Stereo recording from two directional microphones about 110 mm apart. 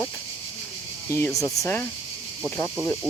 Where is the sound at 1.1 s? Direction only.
25° left (ahead or behind).